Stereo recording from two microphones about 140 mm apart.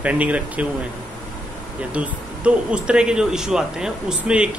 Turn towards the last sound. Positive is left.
turn(degrees=-5)  # may be behind; listen again after turning